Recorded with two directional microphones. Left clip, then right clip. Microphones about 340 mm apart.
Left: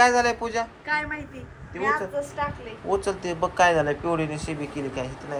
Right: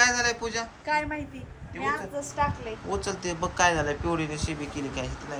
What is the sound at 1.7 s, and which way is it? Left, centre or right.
Speech, centre.